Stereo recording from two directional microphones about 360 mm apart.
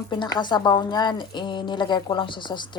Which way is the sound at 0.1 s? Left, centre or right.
Centre.